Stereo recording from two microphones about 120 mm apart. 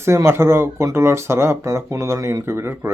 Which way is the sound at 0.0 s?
20° right (ahead or behind).